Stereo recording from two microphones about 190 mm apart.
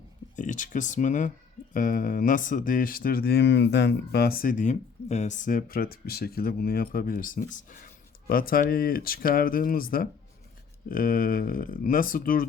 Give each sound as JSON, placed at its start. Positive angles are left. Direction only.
{"t": 0.3, "sound": "speech", "side_deg": 40}